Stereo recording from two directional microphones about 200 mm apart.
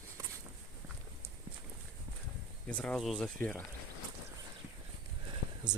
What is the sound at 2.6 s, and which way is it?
Speech, 5° left (ahead or behind).